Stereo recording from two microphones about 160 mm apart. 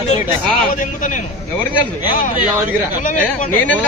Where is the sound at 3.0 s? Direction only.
55° left (ahead or behind).